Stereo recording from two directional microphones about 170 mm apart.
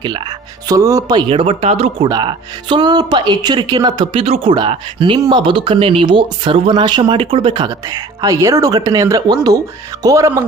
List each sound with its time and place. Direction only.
0.0 s speech: 25° right (ahead or behind)
2.0 s speech: 25° right (ahead or behind)